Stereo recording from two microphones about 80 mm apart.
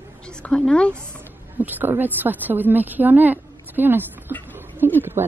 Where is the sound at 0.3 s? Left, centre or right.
Centre.